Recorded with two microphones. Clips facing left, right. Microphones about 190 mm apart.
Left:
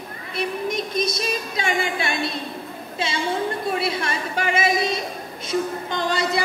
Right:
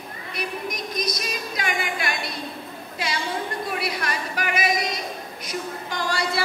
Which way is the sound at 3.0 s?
25° left (ahead or behind).